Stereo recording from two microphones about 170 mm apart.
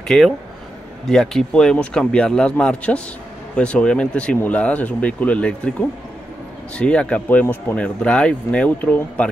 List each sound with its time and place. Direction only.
0.1 s speech: centre (ahead or behind)